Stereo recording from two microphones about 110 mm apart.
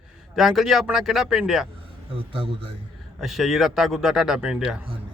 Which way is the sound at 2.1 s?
55° right (ahead or behind).